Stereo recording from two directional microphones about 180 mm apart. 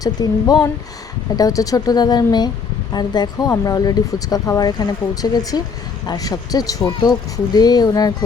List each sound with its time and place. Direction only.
0.0 s speech: 20° left (ahead or behind)